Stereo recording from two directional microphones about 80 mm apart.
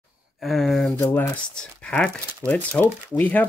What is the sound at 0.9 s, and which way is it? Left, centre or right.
Speech, left.